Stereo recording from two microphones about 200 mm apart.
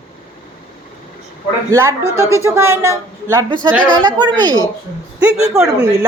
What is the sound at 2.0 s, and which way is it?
Speech, 15° left (ahead or behind).